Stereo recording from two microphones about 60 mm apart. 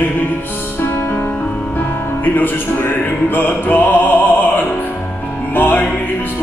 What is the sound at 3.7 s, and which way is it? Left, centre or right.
Music, left.